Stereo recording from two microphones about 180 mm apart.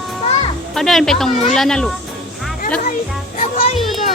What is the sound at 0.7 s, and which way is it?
A woman's voice, centre (ahead or behind).